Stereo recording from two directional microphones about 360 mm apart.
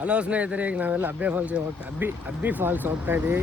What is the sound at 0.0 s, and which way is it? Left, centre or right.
Speech, centre.